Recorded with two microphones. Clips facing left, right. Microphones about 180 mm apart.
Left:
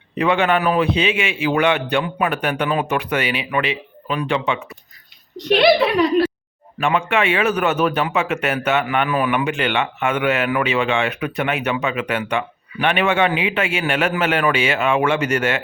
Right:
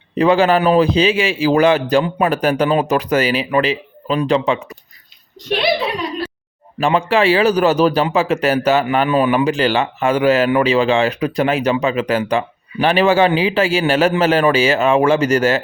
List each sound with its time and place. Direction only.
0.2 s speech: 35° right (ahead or behind)
5.5 s a woman's voice: 60° left (ahead or behind)
6.7 s speech: 35° right (ahead or behind)